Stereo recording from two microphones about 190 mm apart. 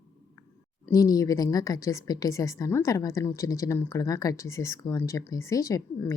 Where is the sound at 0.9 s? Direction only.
20° left (ahead or behind).